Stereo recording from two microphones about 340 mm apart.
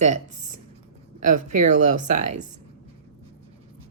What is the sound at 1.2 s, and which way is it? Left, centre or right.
Speech, right.